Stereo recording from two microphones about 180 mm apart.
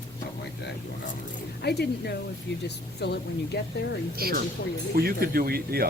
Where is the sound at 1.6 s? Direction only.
65° left (ahead or behind).